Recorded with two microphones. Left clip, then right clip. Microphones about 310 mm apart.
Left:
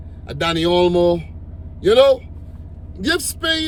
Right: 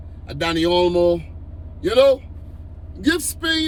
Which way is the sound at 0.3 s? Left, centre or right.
Centre.